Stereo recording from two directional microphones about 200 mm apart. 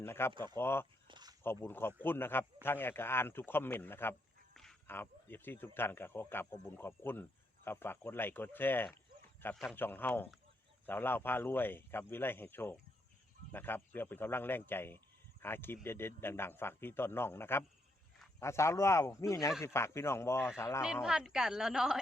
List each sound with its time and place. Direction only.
0.0 s speech: 10° left (ahead or behind)
1.0 s a sound: 20° right (ahead or behind)
1.5 s speech: 10° left (ahead or behind)
20.8 s a woman's voice: 5° right (ahead or behind)